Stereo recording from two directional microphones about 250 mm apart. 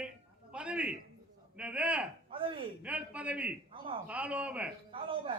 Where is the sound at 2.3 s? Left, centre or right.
Right.